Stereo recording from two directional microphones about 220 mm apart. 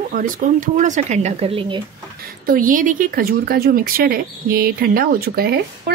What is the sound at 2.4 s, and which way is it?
Speech, 40° right (ahead or behind).